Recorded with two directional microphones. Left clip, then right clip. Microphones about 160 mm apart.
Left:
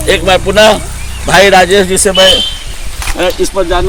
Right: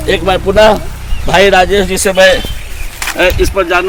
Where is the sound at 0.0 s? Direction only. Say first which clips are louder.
Left 3 dB; 85° right.